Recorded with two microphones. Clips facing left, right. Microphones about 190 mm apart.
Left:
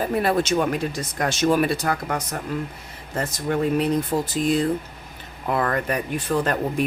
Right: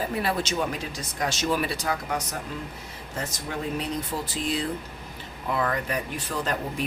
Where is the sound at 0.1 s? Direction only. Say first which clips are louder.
Left 7 dB; 50° left (ahead or behind).